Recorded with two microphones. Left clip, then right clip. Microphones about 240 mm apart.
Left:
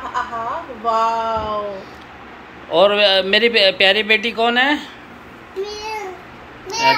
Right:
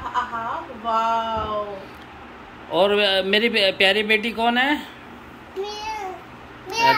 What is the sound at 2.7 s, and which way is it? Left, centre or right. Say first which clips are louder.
Speech: left 5 dB; centre.